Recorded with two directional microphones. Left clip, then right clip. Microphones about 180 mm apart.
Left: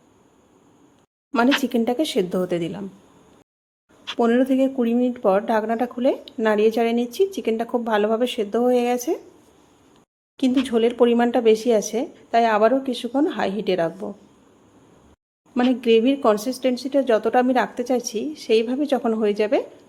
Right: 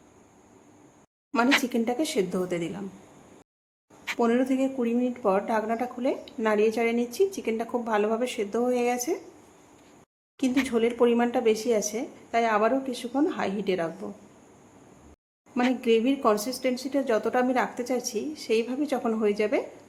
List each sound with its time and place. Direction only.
1.6 s speech: 30° left (ahead or behind)
4.2 s speech: 25° left (ahead or behind)
10.3 s speech: 30° left (ahead or behind)
15.5 s speech: 30° left (ahead or behind)